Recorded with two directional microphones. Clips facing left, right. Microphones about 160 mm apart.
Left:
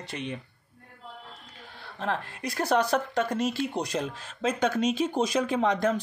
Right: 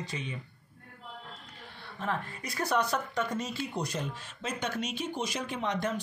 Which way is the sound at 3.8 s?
90° left.